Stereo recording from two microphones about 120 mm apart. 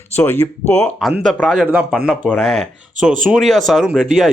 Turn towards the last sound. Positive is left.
turn(degrees=0)  # may be behind; listen again after turning